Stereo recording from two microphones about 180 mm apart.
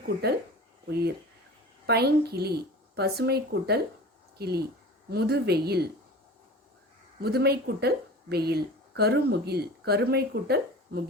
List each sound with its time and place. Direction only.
0.9 s speech: 60° right (ahead or behind)
7.2 s speech: 65° right (ahead or behind)